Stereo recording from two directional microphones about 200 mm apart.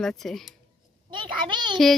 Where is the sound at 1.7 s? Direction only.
Centre (ahead or behind).